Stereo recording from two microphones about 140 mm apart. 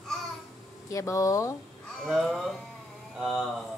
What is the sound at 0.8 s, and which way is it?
Speech, 25° left (ahead or behind).